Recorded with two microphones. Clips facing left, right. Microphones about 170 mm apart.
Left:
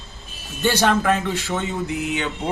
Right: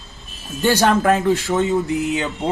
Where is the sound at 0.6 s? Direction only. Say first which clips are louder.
Right 3 dB; 45° right (ahead or behind).